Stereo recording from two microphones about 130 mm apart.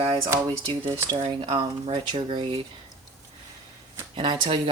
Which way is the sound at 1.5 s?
40° right (ahead or behind).